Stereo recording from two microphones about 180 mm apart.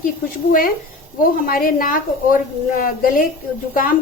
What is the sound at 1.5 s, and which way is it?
A woman's voice, 50° left (ahead or behind).